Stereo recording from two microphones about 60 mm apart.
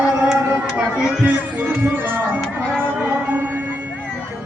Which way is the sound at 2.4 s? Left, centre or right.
Centre.